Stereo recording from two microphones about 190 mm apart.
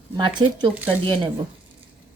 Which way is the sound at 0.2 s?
25° right (ahead or behind).